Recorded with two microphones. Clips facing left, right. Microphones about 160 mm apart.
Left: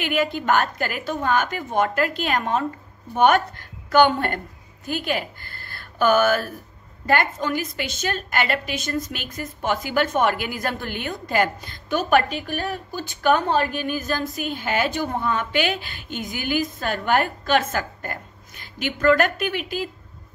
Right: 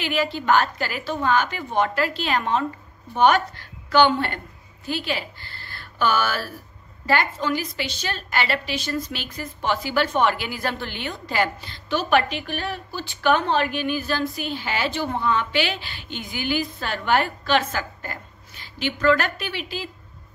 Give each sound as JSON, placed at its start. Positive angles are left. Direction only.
{"t": 0.0, "sound": "a woman's voice", "side_deg": 50}